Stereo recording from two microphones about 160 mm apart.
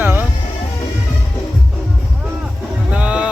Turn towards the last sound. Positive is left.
turn(degrees=-10)  # may be behind; listen again after turning